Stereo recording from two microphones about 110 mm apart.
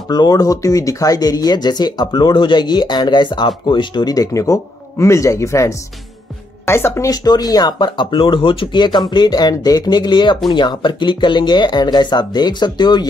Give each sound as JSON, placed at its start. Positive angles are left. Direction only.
{"t": 0.1, "sound": "speech", "side_deg": 35}